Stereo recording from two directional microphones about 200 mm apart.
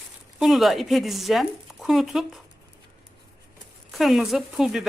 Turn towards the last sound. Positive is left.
turn(degrees=0)  # may be behind; listen again after turning